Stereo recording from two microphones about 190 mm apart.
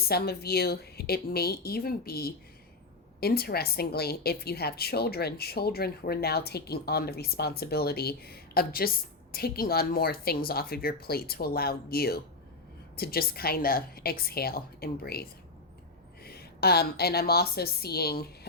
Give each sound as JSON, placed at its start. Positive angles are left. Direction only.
{"t": 0.1, "sound": "a woman's voice", "side_deg": 55}